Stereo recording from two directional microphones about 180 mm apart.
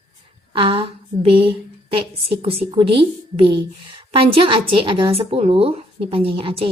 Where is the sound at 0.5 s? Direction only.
30° right (ahead or behind).